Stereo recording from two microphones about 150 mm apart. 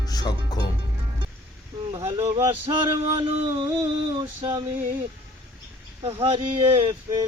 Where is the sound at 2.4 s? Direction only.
40° right (ahead or behind).